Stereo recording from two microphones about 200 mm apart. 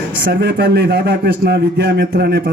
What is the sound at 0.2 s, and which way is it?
A man's voice, 60° right (ahead or behind).